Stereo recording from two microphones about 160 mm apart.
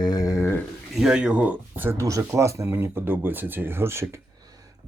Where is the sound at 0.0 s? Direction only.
25° left (ahead or behind).